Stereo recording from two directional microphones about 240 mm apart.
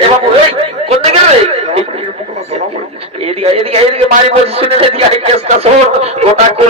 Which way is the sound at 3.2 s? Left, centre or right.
Right.